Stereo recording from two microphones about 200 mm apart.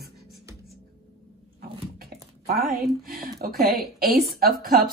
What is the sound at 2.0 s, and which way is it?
Typing, 50° right (ahead or behind).